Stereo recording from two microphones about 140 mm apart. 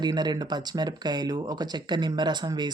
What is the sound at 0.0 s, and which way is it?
Speech, 30° right (ahead or behind).